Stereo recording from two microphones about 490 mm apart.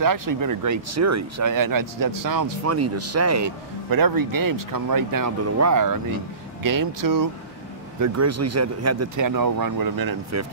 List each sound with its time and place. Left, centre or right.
0.0 s speech: right